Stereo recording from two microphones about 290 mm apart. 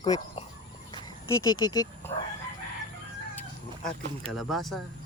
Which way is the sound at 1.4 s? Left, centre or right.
Centre.